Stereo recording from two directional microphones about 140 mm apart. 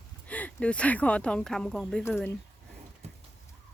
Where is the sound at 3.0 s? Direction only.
50° right (ahead or behind).